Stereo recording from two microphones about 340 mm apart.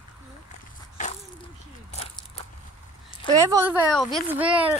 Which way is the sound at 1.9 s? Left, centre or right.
Centre.